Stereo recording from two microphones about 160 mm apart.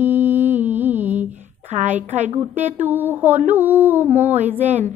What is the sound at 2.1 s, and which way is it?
Speech, 45° right (ahead or behind).